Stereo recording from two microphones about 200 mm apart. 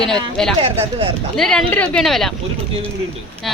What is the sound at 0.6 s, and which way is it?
Speech, 30° right (ahead or behind).